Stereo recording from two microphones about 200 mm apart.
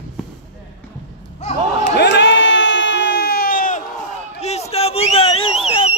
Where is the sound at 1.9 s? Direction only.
60° left (ahead or behind); by 3.8 s 45° left (ahead or behind).